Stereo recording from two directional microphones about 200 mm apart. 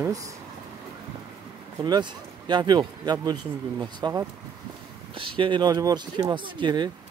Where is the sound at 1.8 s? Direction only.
20° right (ahead or behind).